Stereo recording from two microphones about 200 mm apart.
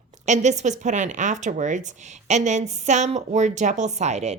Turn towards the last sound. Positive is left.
turn(degrees=-35)  # may be behind; listen again after turning